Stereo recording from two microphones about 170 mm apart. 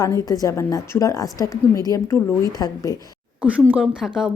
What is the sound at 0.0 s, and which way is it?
A woman's voice, 20° left (ahead or behind).